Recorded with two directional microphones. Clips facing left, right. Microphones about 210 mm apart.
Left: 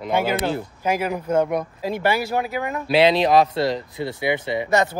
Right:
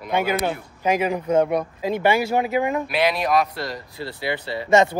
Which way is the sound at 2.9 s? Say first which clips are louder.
Left 5 dB; 25° left (ahead or behind).